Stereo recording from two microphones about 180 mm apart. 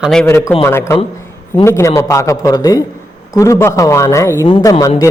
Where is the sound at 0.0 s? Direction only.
5° left (ahead or behind).